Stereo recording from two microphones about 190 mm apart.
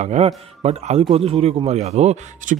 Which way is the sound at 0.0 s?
35° right (ahead or behind).